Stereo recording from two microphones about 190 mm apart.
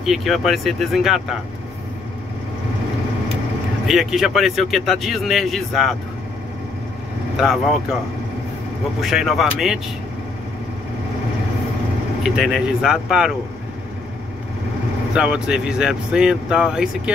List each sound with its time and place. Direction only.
0.0 s speech: centre (ahead or behind)
3.8 s speech: centre (ahead or behind)
7.3 s speech: centre (ahead or behind)
9.0 s speech: centre (ahead or behind)
12.2 s speech: centre (ahead or behind)
15.1 s speech: 5° right (ahead or behind)